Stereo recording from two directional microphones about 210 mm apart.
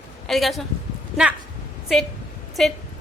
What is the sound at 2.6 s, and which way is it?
Speech, centre (ahead or behind).